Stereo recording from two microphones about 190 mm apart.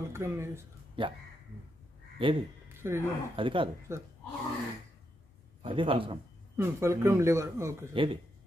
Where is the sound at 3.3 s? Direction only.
25° right (ahead or behind).